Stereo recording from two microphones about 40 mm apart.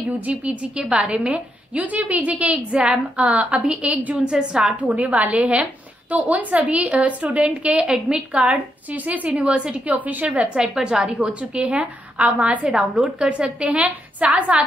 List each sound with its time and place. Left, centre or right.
0.2 s a woman's voice: right
0.8 s a woman's voice: right
7.8 s a woman's voice: centre
8.3 s a woman's voice: right
9.3 s a woman's voice: right
9.8 s a woman's voice: right
10.4 s a woman's voice: centre; by 12.6 s right
12.6 s a woman's voice: right